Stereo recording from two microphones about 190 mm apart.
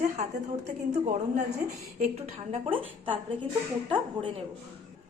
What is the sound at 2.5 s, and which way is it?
A woman's voice, 30° right (ahead or behind).